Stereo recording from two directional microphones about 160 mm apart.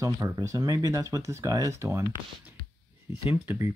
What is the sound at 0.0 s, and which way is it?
Speech, 20° right (ahead or behind).